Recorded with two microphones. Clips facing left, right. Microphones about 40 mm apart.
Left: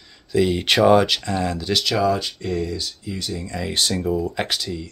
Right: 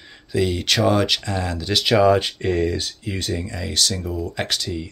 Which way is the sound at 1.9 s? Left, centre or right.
Right.